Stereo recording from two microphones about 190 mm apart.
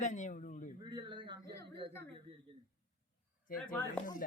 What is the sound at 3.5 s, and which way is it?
Speech, 50° left (ahead or behind).